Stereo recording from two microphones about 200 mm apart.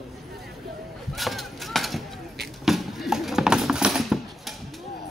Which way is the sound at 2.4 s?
Centre (ahead or behind).